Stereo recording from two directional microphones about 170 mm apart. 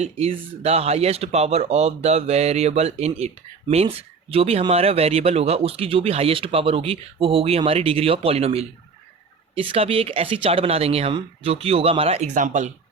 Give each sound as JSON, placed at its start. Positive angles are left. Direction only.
{"t": 0.0, "sound": "speech", "side_deg": -35}